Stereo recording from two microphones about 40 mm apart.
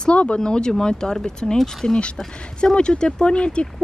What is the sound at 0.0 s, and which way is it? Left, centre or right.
Speech, left.